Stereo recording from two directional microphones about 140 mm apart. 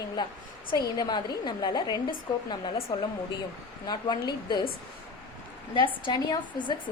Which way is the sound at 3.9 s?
30° left (ahead or behind).